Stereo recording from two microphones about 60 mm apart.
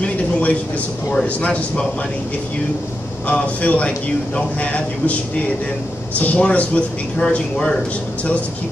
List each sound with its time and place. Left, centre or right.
0.0 s a sound: left
1.2 s speech: left
3.3 s speech: left
6.1 s speech: left